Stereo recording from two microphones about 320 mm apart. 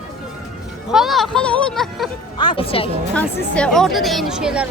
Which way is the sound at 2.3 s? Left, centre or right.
Centre.